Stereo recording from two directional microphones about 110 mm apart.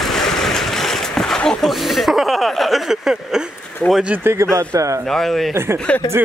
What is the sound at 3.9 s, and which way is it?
Speech, 10° right (ahead or behind).